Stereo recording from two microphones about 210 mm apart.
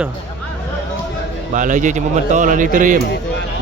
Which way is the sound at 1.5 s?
35° right (ahead or behind).